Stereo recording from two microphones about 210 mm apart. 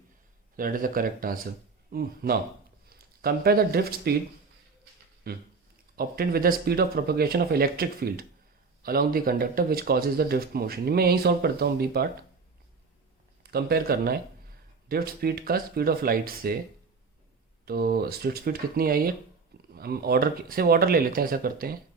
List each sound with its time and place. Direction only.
0.5 s speech: 40° right (ahead or behind)
5.2 s speech: 45° right (ahead or behind)
13.4 s speech: 50° right (ahead or behind)
17.7 s speech: 45° right (ahead or behind)